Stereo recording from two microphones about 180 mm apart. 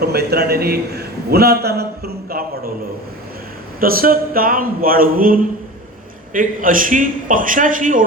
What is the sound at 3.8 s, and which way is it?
A man's voice, 55° right (ahead or behind).